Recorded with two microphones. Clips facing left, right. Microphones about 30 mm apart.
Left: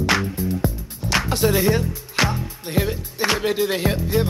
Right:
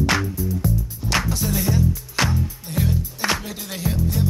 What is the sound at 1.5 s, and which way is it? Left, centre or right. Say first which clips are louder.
Music: left 3 dB; left.